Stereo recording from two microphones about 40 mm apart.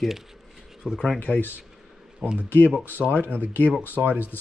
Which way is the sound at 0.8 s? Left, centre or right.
Left.